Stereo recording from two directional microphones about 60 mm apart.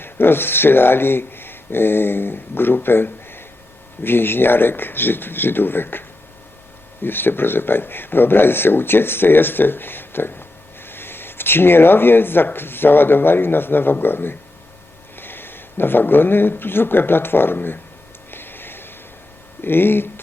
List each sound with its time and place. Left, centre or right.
0.0 s speech: left
18.3 s a sound: left
19.6 s speech: left